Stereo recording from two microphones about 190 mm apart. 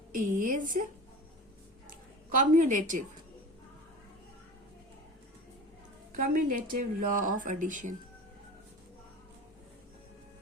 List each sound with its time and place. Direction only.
0.1 s speech: 45° right (ahead or behind)
2.4 s speech: 45° right (ahead or behind)
6.1 s speech: 45° right (ahead or behind)